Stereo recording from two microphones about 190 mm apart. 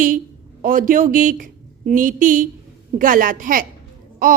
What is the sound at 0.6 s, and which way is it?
A woman's voice, 45° right (ahead or behind).